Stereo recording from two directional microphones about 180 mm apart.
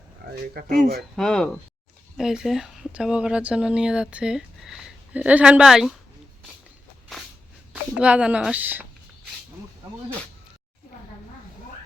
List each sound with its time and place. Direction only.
0.2 s a sound: 65° right (ahead or behind)
1.1 s speech: 5° left (ahead or behind)
7.7 s a child's voice: 5° right (ahead or behind)